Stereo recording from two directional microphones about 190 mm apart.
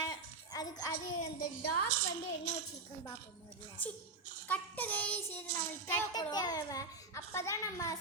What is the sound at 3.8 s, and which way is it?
Speech, 10° left (ahead or behind).